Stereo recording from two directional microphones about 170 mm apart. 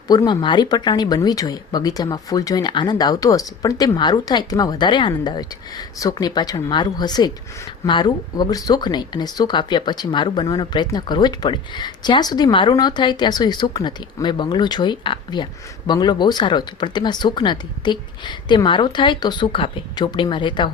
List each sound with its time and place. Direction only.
0.1 s speech: 25° left (ahead or behind)